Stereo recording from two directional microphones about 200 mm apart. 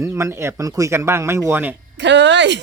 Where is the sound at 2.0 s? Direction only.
65° right (ahead or behind).